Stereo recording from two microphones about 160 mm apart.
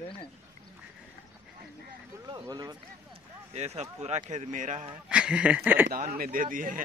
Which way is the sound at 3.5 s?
40° right (ahead or behind).